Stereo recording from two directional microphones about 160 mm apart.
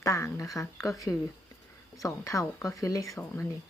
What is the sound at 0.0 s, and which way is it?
Speech, 20° left (ahead or behind).